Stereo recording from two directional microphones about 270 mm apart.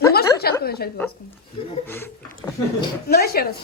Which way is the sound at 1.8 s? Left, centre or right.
Centre.